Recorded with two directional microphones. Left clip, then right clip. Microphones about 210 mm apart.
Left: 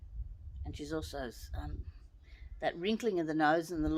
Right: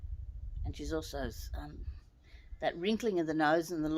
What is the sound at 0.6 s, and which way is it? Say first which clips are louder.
Speech: right 1 dB; 20° right (ahead or behind).